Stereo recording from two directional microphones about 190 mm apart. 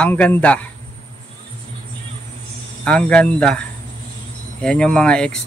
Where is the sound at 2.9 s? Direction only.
5° left (ahead or behind).